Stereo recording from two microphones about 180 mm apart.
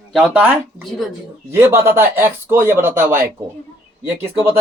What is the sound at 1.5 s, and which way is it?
Speech, 15° right (ahead or behind).